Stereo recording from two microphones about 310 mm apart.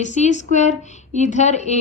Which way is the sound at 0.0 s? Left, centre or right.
Left.